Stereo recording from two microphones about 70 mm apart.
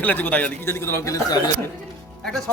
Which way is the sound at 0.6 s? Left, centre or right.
Left.